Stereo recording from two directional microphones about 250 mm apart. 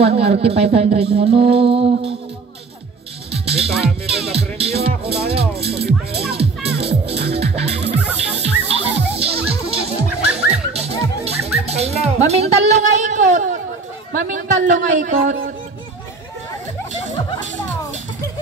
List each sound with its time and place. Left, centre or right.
0.4 s music: right
3.3 s music: right
4.3 s speech: right
8.0 s music: centre
8.4 s music: right
11.2 s a woman's voice: right